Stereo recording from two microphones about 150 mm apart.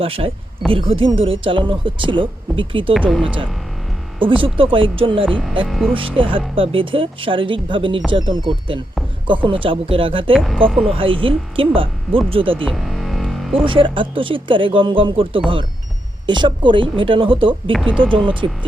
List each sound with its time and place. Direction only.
0.0 s speech: 40° right (ahead or behind)
3.1 s speech: centre (ahead or behind)
4.4 s speech: 35° right (ahead or behind)
5.6 s speech: centre (ahead or behind)
5.9 s speech: 35° right (ahead or behind)
10.3 s speech: 5° left (ahead or behind)
10.9 s speech: 35° right (ahead or behind)
12.6 s music: centre (ahead or behind)
13.7 s speech: 35° right (ahead or behind)
17.7 s speech: 5° left (ahead or behind)
18.4 s speech: 30° right (ahead or behind)